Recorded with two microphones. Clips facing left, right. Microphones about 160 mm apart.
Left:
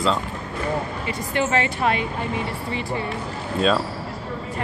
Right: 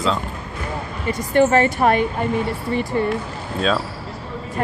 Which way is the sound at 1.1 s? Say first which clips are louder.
Right 8 dB; 45° right (ahead or behind).